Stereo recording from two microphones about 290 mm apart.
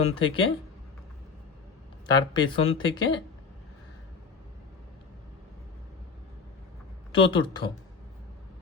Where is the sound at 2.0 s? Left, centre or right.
Centre.